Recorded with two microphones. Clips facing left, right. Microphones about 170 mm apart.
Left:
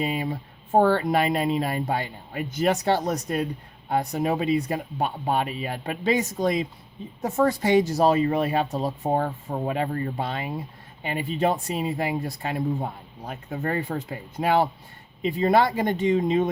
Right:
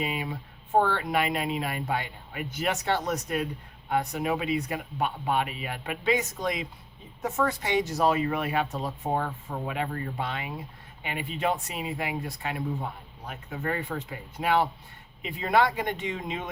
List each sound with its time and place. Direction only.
0.0 s speech: 35° left (ahead or behind)